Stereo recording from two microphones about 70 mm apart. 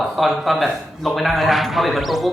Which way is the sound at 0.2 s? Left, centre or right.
Centre.